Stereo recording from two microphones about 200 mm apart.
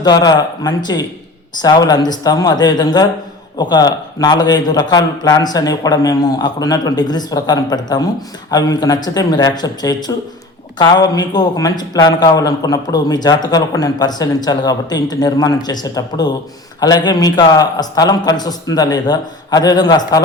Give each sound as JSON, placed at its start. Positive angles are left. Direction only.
{"t": 0.0, "sound": "a man's voice", "side_deg": 20}